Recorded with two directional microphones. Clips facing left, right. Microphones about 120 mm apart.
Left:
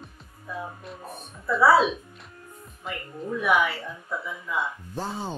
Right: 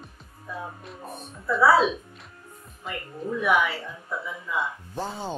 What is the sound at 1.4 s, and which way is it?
Speech, centre (ahead or behind).